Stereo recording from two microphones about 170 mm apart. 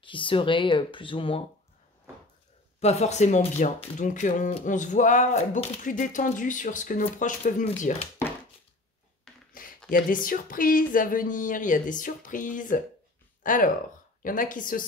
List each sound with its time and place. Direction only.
0.0 s speech: 30° left (ahead or behind)
2.8 s speech: 40° left (ahead or behind)
9.3 s a sound: centre (ahead or behind)
9.8 s speech: 55° left (ahead or behind)
13.4 s a sound: 50° left (ahead or behind)
14.2 s speech: 50° left (ahead or behind)